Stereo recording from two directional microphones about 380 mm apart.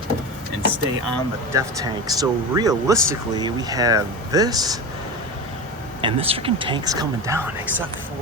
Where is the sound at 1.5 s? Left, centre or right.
Centre.